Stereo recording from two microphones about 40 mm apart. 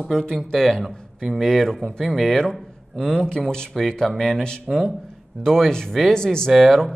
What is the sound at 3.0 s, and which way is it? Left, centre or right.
Speech, centre.